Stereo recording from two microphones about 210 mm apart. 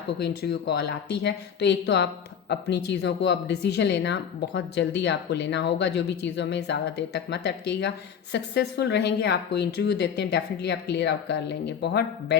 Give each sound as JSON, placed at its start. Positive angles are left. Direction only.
{"t": 0.2, "sound": "a woman's voice", "side_deg": 50}